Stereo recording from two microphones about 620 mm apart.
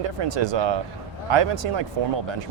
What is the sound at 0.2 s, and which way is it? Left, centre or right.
Speech, right.